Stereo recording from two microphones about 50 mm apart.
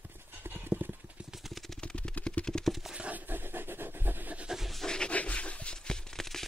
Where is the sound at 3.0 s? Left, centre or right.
Right.